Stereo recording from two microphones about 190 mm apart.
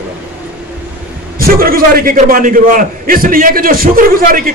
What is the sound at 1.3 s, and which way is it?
A man's voice, 50° right (ahead or behind).